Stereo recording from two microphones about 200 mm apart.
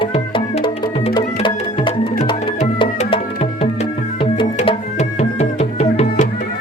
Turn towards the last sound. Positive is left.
turn(degrees=30)  # may be behind; listen again after turning